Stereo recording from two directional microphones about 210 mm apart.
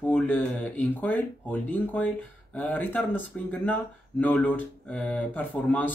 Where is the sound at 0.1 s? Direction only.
5° left (ahead or behind).